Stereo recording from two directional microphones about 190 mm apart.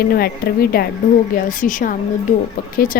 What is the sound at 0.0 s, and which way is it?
A woman's voice, 55° left (ahead or behind).